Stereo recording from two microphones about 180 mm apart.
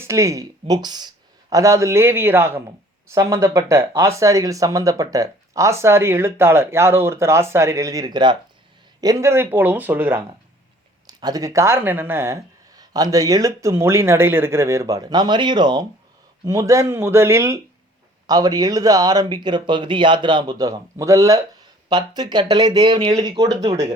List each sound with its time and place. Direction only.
0.0 s speech: 15° right (ahead or behind)
11.0 s speech: 20° right (ahead or behind)